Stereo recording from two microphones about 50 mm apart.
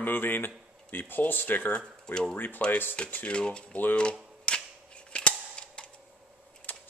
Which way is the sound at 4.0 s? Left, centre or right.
Centre.